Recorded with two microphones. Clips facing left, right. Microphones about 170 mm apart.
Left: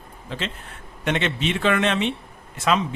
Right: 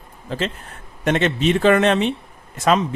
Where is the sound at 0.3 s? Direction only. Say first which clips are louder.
Right 6 dB; 40° right (ahead or behind).